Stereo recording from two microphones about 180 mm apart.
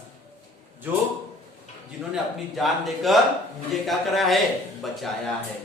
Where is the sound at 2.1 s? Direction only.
Centre (ahead or behind).